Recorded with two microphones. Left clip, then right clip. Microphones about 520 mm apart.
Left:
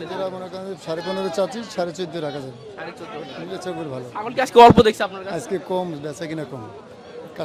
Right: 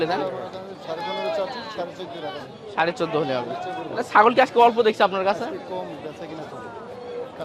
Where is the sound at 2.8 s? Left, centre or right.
Right.